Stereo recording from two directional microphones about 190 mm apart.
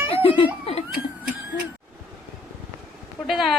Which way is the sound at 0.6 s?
30° left (ahead or behind).